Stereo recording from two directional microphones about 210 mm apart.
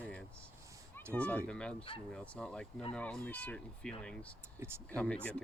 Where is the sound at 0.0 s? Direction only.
5° left (ahead or behind).